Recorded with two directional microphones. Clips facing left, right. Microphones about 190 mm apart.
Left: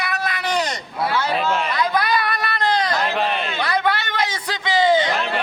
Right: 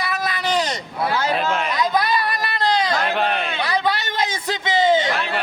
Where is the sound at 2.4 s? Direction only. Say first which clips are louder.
Even; 20° right (ahead or behind).